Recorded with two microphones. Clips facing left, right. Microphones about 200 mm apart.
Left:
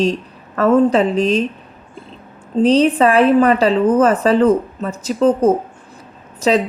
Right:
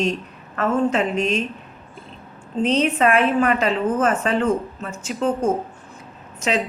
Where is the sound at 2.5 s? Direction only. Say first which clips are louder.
Left 7 dB; 35° left (ahead or behind).